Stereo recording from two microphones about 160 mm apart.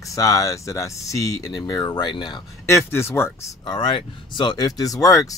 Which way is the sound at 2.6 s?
15° left (ahead or behind).